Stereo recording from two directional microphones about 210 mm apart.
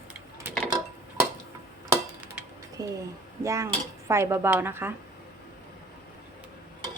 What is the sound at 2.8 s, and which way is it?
A woman's voice, 15° right (ahead or behind).